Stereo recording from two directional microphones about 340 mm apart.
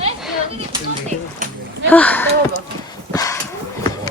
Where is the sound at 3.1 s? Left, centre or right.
Centre.